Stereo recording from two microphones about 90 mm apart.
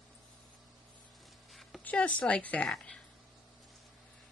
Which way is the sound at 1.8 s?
15° left (ahead or behind).